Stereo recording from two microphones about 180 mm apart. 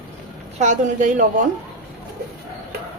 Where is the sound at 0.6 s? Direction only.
45° right (ahead or behind).